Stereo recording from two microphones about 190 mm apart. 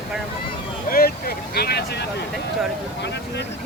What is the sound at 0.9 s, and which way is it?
Speech, 50° left (ahead or behind).